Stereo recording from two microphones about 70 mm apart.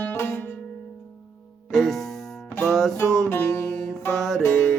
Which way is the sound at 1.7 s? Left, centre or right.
Centre.